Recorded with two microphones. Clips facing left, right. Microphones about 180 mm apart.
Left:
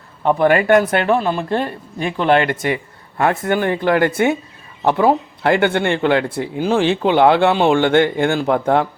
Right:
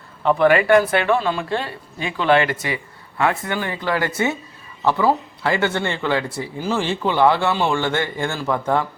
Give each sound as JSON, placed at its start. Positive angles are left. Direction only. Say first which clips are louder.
{"t": 0.3, "sound": "speech", "louder": "left 1 dB", "side_deg": 45}
{"t": 5.4, "sound": "speech", "louder": "left 5 dB", "side_deg": 55}